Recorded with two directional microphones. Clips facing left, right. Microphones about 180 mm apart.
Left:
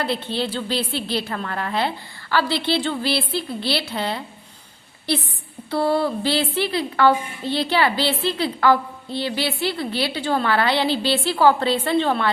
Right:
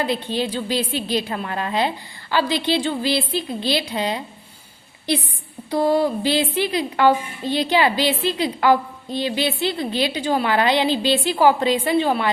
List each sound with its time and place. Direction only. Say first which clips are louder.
0.0 s a woman's voice: right 2 dB; 15° right (ahead or behind)
5.7 s a woman's voice: right 2 dB; 15° right (ahead or behind)